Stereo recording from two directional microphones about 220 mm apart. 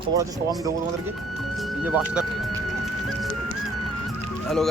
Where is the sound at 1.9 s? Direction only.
5° right (ahead or behind).